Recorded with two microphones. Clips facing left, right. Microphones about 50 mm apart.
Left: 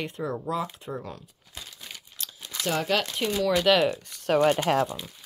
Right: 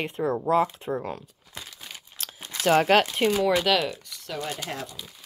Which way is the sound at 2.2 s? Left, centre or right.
Right.